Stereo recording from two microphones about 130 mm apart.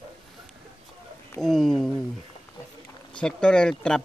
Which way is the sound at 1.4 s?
Centre (ahead or behind).